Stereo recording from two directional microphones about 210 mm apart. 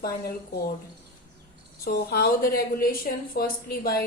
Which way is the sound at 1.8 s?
45° left (ahead or behind).